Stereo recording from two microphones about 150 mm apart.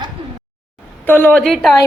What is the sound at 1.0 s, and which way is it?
Speech, 15° left (ahead or behind).